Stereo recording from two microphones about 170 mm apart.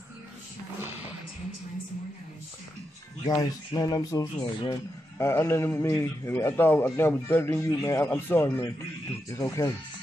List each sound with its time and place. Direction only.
3.3 s a man's voice: 20° left (ahead or behind)